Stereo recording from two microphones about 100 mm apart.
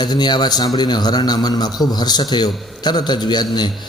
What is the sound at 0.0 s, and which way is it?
A man's voice, 45° left (ahead or behind).